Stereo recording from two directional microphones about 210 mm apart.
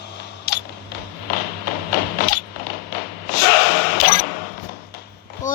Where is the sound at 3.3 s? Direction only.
45° left (ahead or behind).